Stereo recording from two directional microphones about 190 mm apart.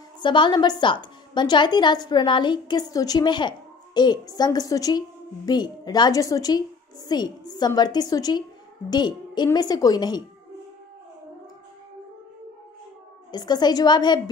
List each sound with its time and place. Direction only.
0.2 s a woman's voice: 25° left (ahead or behind)
13.3 s a woman's voice: 20° left (ahead or behind)